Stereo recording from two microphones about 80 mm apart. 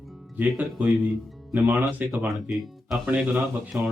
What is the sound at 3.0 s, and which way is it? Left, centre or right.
Speech, centre.